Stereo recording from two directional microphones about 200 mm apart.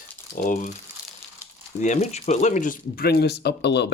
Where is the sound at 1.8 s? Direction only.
35° left (ahead or behind).